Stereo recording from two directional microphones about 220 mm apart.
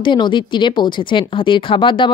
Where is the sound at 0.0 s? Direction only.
20° left (ahead or behind).